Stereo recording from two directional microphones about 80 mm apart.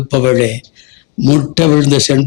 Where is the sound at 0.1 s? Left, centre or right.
Left.